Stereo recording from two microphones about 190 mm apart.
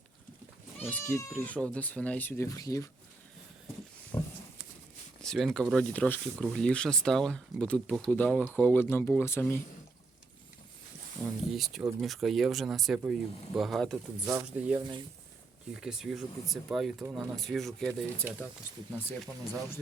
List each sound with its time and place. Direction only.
0.8 s speech: 10° left (ahead or behind)
4.1 s a sound: 15° left (ahead or behind)
5.2 s speech: centre (ahead or behind)
11.5 s speech: centre (ahead or behind)
14.3 s speech: 10° right (ahead or behind)
14.8 s speech: 25° right (ahead or behind)
15.7 s speech: 5° right (ahead or behind)